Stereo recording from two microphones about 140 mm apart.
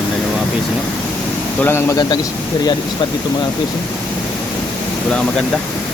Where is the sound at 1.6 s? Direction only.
15° left (ahead or behind).